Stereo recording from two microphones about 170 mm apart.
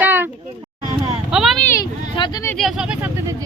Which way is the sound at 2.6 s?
Centre (ahead or behind).